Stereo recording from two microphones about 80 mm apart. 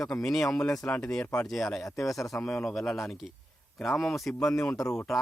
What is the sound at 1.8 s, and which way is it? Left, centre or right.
Speech, left.